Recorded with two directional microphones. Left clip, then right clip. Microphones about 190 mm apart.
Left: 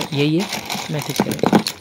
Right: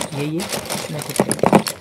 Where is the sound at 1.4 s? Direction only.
35° right (ahead or behind).